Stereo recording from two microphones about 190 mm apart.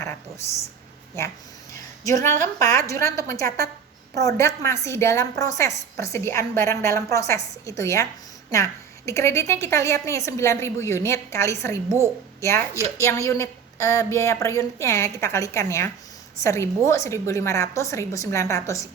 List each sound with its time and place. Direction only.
0.0 s a sound: 15° left (ahead or behind)
1.7 s a woman's voice: 15° left (ahead or behind)
11.9 s a woman's voice: 15° right (ahead or behind)
12.4 s a woman's voice: 15° left (ahead or behind)